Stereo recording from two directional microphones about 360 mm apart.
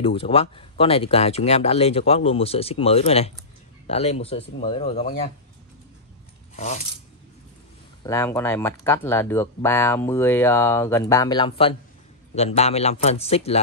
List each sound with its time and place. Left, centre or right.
0.0 s speech: centre
6.5 s speech: centre
8.0 s speech: centre